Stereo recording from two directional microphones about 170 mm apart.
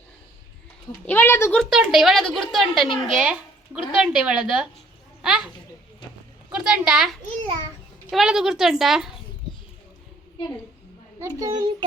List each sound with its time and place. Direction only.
1.0 s speech: 15° left (ahead or behind)
1.7 s a woman's voice: centre (ahead or behind)
6.7 s a woman's voice: 5° right (ahead or behind)
11.2 s a child's voice: 20° right (ahead or behind)